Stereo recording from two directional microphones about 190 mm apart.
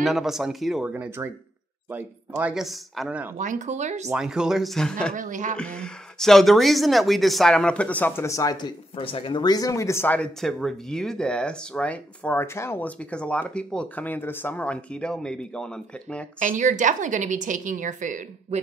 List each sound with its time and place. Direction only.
0.0 s speech: centre (ahead or behind)
3.3 s a woman's voice: 40° right (ahead or behind)
4.1 s speech: 5° right (ahead or behind)
5.1 s a woman's voice: 40° right (ahead or behind)
5.6 s speech: 5° left (ahead or behind)
16.3 s a woman's voice: 40° right (ahead or behind)